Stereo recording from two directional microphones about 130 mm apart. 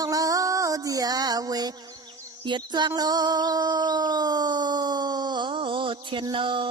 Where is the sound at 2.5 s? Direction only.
35° right (ahead or behind).